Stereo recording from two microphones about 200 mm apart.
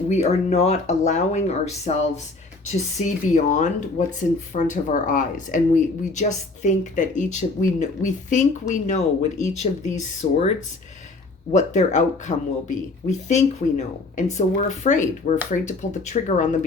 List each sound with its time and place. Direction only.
0.1 s speech: 30° left (ahead or behind)
11.5 s speech: 35° left (ahead or behind)